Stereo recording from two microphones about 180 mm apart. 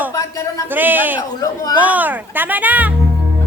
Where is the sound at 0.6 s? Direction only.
10° right (ahead or behind).